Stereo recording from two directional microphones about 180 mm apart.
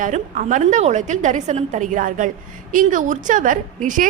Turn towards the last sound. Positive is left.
turn(degrees=-45)  # may be behind; listen again after turning